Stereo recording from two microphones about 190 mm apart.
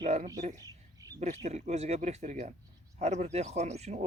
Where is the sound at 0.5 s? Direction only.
20° right (ahead or behind).